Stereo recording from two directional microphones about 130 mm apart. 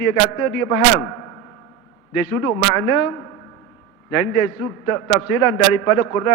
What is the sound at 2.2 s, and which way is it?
A man's voice, 25° left (ahead or behind).